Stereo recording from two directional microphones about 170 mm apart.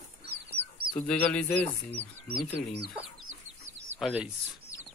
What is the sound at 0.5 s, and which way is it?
Chicken, 35° right (ahead or behind).